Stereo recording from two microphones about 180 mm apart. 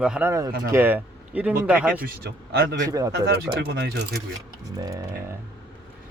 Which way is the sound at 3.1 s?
60° right (ahead or behind).